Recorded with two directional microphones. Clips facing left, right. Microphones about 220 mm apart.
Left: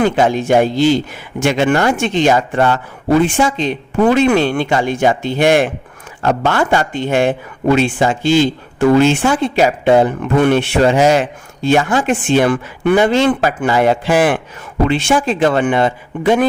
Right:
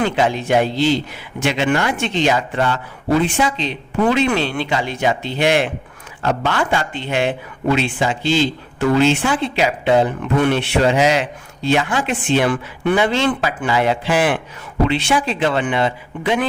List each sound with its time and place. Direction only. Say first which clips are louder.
0.0 s speech: left 5 dB; 45° left (ahead or behind)